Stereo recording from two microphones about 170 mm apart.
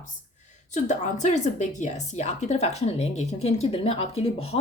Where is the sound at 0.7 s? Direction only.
45° left (ahead or behind).